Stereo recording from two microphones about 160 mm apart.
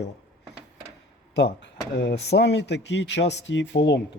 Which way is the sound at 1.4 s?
80° left.